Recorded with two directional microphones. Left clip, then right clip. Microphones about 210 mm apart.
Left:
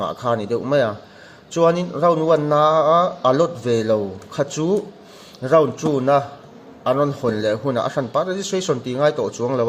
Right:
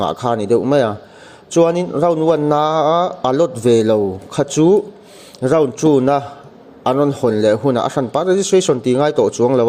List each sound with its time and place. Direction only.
0.0 s a man's voice: 35° right (ahead or behind)